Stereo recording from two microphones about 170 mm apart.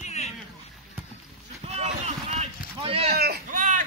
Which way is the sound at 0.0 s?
40° left (ahead or behind).